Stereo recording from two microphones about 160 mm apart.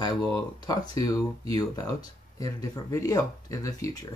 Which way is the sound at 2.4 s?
20° left (ahead or behind).